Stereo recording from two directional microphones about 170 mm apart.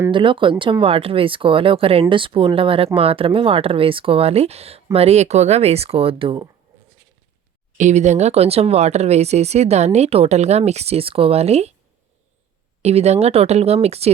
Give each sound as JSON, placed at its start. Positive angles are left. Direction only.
{"t": 0.1, "sound": "speech", "side_deg": -30}
{"t": 7.8, "sound": "speech", "side_deg": -45}
{"t": 12.8, "sound": "speech", "side_deg": -40}